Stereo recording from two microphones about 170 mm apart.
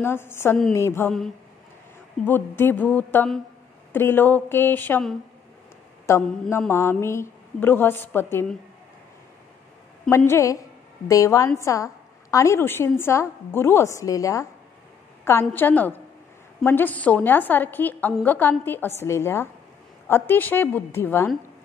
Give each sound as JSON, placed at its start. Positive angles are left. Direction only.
{"t": 0.0, "sound": "a woman's voice", "side_deg": 15}
{"t": 2.2, "sound": "a woman's voice", "side_deg": 10}
{"t": 6.1, "sound": "a woman's voice", "side_deg": 15}
{"t": 10.0, "sound": "a woman's voice", "side_deg": 15}
{"t": 15.5, "sound": "a woman's voice", "side_deg": 10}